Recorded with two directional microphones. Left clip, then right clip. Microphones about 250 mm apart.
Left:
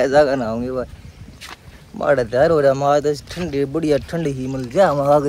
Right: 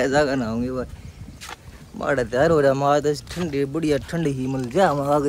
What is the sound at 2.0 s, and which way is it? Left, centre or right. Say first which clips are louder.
Speech: left 5 dB; centre.